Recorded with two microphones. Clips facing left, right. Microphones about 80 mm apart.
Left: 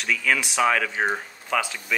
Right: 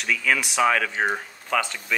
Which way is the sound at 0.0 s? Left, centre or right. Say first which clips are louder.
Even; centre.